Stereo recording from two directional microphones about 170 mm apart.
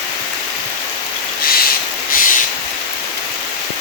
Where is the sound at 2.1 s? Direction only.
55° left (ahead or behind).